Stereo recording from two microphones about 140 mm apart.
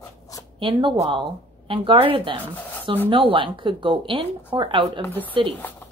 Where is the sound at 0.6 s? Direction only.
35° right (ahead or behind).